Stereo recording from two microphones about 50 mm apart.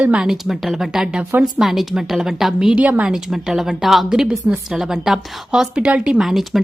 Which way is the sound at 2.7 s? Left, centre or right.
Right.